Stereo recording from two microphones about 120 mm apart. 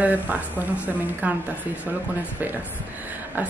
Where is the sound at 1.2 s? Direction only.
15° right (ahead or behind).